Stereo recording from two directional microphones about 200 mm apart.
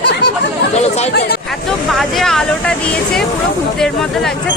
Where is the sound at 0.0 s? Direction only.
55° left (ahead or behind).